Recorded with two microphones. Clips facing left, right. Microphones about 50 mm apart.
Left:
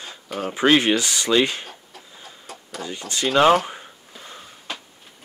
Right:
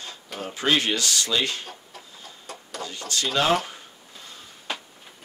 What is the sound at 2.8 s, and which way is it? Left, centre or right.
Speech, left.